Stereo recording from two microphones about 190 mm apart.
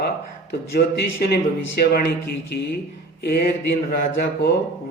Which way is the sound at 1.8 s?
55° left (ahead or behind).